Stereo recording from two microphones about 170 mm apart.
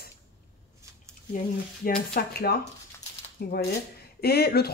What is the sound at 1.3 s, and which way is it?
A woman's voice, 60° left (ahead or behind).